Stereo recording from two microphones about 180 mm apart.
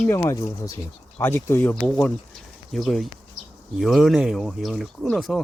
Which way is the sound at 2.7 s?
Centre (ahead or behind).